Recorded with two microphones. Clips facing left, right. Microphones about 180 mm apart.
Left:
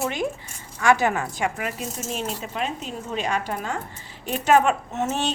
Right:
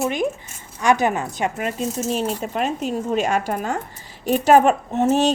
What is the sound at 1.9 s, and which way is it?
Speech, 35° right (ahead or behind).